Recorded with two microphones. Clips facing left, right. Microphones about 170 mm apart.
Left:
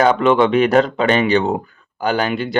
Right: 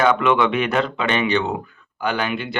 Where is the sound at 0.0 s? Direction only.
35° left (ahead or behind).